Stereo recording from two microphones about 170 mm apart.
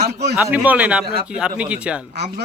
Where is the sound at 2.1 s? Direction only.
80° right.